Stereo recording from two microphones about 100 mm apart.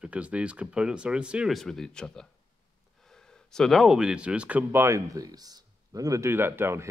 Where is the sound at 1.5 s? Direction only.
5° left (ahead or behind); by 6.9 s 25° right (ahead or behind).